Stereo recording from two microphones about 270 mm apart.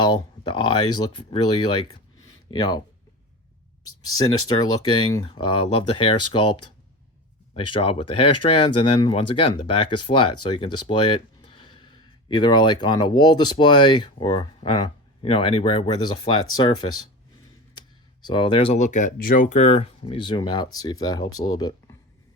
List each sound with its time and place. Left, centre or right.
0.0 s speech: centre
4.9 s speech: centre
7.7 s speech: centre
10.8 s a sound: centre
12.3 s speech: centre
18.3 s speech: centre
18.9 s speech: left
19.2 s speech: left; by 21.9 s centre